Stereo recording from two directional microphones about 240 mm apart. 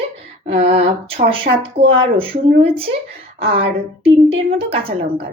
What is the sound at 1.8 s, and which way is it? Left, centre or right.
A woman's voice, right.